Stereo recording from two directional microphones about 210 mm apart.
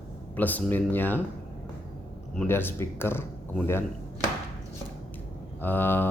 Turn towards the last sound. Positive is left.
turn(degrees=10)  # may be behind; listen again after turning